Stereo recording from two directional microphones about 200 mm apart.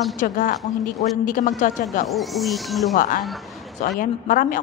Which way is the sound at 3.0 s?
45° left (ahead or behind).